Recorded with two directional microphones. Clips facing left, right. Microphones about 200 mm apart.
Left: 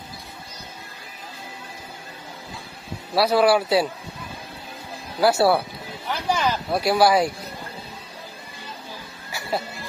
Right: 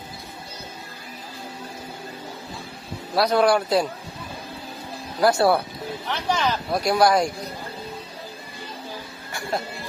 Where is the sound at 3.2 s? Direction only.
5° left (ahead or behind).